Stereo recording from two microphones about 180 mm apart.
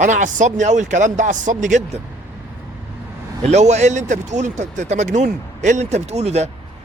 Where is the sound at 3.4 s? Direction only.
40° right (ahead or behind).